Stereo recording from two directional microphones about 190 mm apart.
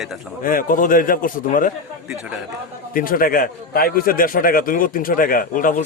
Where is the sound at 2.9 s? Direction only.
50° left (ahead or behind).